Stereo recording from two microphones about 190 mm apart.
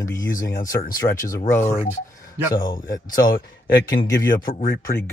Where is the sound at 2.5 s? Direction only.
20° left (ahead or behind).